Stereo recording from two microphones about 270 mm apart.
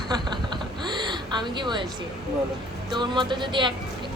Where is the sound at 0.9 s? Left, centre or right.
Centre.